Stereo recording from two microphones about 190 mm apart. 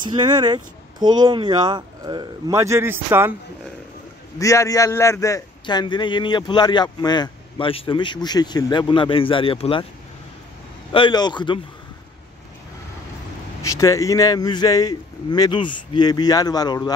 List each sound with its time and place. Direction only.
0.0 s speech: 25° right (ahead or behind)
4.4 s a man's voice: 15° left (ahead or behind)
10.9 s a man's voice: 25° left (ahead or behind)
13.6 s a man's voice: 15° left (ahead or behind)